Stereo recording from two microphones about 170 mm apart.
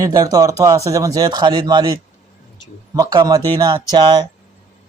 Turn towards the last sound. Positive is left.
turn(degrees=-25)  # may be behind; listen again after turning